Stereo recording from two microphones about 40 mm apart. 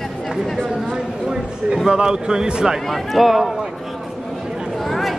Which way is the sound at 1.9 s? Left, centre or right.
Centre.